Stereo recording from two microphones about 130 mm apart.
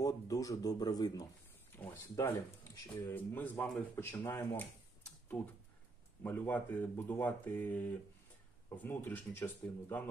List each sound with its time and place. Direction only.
0.0 s speech: 25° left (ahead or behind)
6.2 s speech: 10° left (ahead or behind)